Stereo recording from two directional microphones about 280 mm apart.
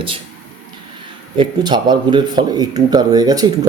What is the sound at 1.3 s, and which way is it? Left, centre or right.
Speech, centre.